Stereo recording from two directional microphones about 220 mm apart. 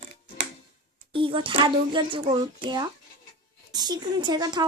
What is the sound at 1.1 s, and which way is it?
A child's voice, 25° right (ahead or behind).